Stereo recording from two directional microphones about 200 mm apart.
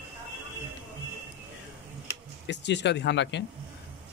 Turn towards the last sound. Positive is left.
turn(degrees=65)  # may be behind; listen again after turning